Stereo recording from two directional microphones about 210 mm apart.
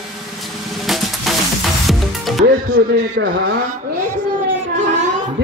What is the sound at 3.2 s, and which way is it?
Speech, 60° right (ahead or behind).